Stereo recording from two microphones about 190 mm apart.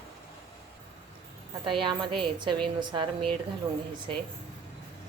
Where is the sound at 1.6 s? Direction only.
25° right (ahead or behind).